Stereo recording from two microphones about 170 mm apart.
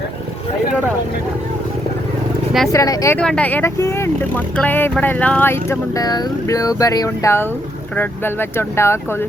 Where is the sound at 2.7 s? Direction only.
20° left (ahead or behind).